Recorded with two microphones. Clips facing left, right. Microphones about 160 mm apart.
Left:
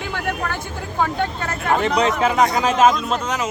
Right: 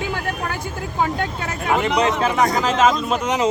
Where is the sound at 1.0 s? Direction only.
15° right (ahead or behind).